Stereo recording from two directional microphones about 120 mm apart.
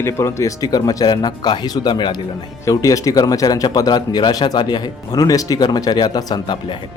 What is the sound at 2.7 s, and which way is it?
Speech, 30° left (ahead or behind).